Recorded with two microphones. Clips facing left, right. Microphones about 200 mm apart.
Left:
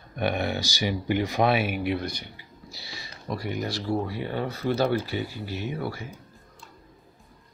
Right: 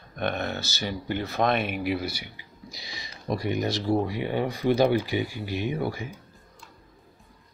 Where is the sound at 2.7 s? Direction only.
15° right (ahead or behind).